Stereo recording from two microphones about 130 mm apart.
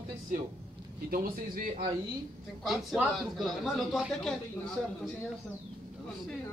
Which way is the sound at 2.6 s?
5° right (ahead or behind).